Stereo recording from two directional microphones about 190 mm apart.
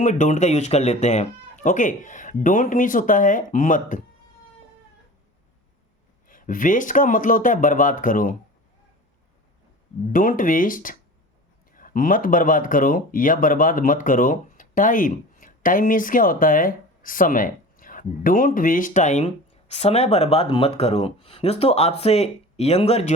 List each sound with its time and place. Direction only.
0.0 s speech: 40° left (ahead or behind)
6.2 s speech: 45° left (ahead or behind)
10.1 s speech: 45° left (ahead or behind)